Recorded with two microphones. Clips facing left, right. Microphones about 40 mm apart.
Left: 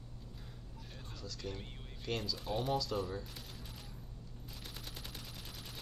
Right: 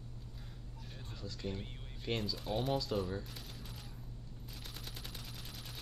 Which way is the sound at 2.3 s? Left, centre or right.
Centre.